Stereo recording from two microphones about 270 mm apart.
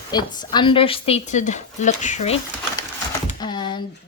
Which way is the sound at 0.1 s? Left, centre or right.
Centre.